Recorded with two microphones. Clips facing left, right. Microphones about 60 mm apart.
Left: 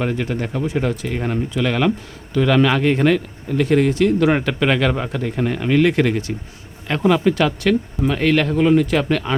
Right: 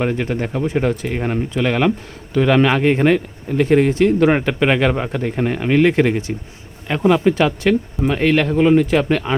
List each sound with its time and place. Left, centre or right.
0.0 s speech: right
6.8 s speech: centre
7.3 s speech: centre